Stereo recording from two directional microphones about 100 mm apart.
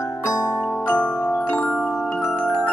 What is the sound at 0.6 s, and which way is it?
Glockenspiel, 10° left (ahead or behind).